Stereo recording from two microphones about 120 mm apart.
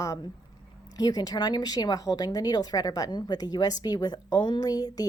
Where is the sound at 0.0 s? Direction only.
25° left (ahead or behind).